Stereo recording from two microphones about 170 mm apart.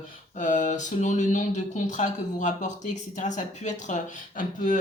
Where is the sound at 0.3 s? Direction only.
50° left (ahead or behind).